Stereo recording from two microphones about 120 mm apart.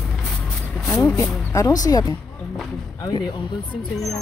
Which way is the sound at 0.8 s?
25° left (ahead or behind).